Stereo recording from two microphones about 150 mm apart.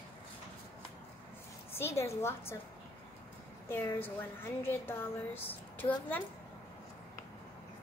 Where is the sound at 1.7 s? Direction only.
15° left (ahead or behind).